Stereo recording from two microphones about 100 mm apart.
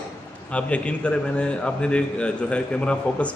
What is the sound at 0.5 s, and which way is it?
A man's voice, 10° left (ahead or behind).